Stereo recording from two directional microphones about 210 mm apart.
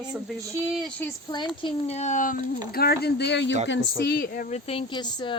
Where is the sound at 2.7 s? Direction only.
50° left (ahead or behind).